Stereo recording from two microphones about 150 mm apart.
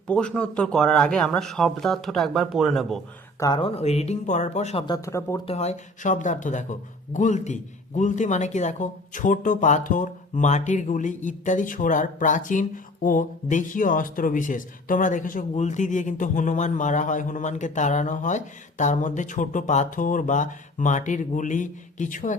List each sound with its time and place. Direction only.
0.1 s speech: 5° left (ahead or behind)
3.4 s speech: 30° left (ahead or behind)
3.8 s speech: 45° left (ahead or behind)
4.9 s speech: 20° left (ahead or behind)
5.5 s a man's voice: 45° left (ahead or behind)